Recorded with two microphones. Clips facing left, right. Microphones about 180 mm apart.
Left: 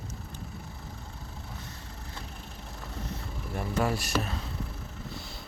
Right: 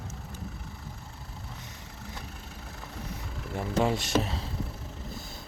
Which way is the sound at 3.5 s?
20° right (ahead or behind).